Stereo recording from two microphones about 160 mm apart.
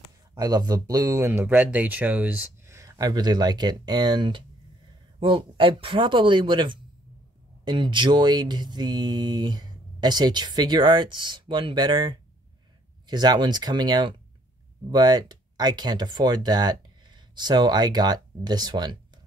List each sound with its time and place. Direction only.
0.3 s mantra: 25° right (ahead or behind)
5.2 s speech: 30° right (ahead or behind)
7.6 s mantra: 30° right (ahead or behind)
14.9 s speech: 25° right (ahead or behind)